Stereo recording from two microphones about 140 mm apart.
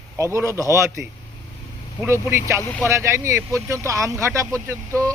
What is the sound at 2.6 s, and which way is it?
Speech, 20° left (ahead or behind).